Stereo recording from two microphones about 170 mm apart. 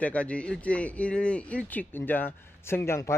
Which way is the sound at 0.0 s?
10° left (ahead or behind).